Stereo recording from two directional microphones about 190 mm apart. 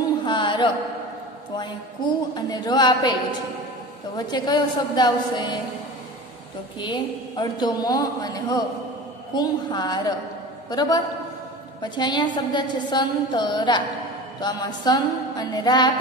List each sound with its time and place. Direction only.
0.2 s a sound: 25° left (ahead or behind)
1.6 s a woman's voice: 20° left (ahead or behind)
6.8 s a woman's voice: 25° left (ahead or behind)